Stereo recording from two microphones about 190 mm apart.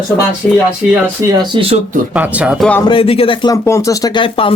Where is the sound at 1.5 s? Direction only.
30° right (ahead or behind).